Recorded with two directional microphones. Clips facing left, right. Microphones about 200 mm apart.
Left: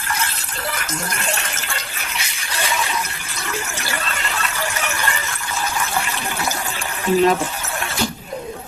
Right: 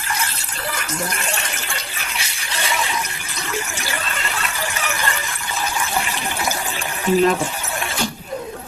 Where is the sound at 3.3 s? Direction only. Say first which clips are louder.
Right 1 dB; 15° right (ahead or behind).